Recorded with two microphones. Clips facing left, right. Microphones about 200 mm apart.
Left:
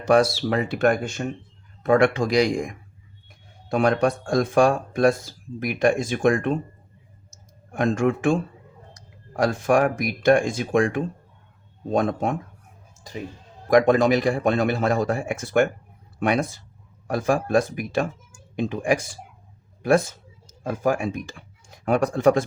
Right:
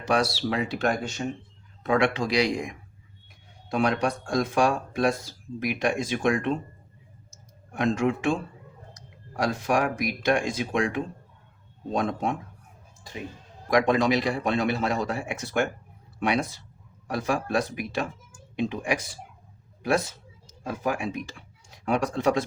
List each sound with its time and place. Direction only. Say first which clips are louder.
0.0 s a man's voice: left 6 dB; 50° left (ahead or behind)
7.7 s a man's voice: left 3 dB; 50° left (ahead or behind)
13.7 s a man's voice: left 5 dB; 50° left (ahead or behind)
20.5 s a man's voice: left 6 dB; 45° left (ahead or behind)